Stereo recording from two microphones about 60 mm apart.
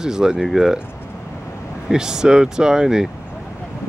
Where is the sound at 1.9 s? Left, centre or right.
Centre.